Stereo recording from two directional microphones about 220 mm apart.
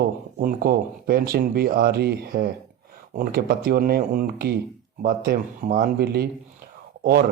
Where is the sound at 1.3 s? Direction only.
45° right (ahead or behind).